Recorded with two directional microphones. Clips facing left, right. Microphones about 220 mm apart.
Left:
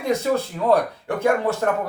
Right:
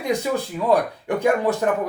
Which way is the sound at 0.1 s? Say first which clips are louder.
Left 2 dB; 15° right (ahead or behind).